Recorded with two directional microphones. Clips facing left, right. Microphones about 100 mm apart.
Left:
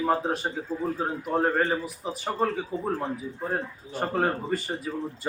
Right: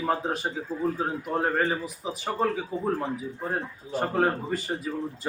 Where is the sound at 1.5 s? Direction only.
Centre (ahead or behind).